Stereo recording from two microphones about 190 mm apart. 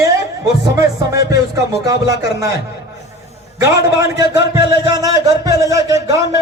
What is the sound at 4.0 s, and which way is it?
A man's voice, 20° right (ahead or behind).